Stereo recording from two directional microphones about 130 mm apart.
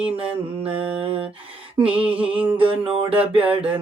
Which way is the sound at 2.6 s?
45° right (ahead or behind).